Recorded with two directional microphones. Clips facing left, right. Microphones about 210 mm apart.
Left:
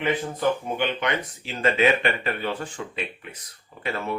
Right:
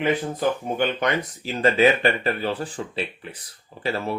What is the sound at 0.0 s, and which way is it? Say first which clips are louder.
Speech: right 2 dB; 40° right (ahead or behind).